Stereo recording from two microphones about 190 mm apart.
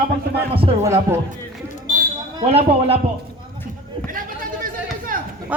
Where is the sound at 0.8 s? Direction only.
15° right (ahead or behind).